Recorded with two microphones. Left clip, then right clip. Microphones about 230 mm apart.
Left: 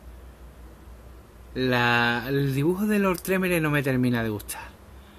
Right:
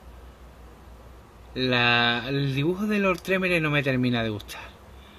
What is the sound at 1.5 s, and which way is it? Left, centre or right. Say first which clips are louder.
Speech: right 1 dB; centre.